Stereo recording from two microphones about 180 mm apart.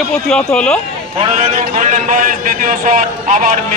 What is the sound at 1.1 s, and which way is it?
A man's voice, 35° right (ahead or behind).